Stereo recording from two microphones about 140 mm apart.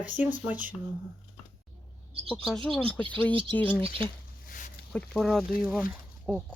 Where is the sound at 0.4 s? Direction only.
10° right (ahead or behind).